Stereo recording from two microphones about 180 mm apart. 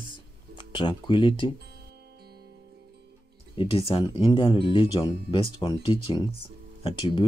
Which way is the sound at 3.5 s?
30° left (ahead or behind).